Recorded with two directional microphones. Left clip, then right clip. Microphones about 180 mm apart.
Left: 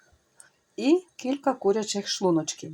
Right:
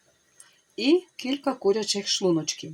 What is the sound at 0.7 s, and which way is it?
Speech, centre (ahead or behind).